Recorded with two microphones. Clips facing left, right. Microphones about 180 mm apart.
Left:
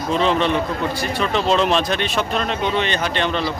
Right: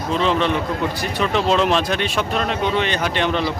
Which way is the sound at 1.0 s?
10° right (ahead or behind).